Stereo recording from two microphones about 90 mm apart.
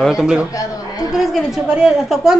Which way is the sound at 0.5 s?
40° left (ahead or behind).